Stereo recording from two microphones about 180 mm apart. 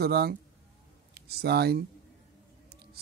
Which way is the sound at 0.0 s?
60° right (ahead or behind).